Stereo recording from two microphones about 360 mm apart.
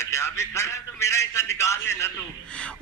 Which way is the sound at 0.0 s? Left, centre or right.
Centre.